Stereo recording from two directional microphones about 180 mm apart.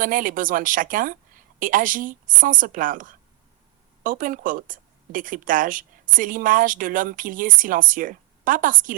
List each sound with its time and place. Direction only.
0.0 s a woman's voice: 50° right (ahead or behind)